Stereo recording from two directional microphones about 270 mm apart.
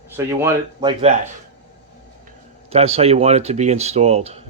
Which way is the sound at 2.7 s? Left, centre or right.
Right.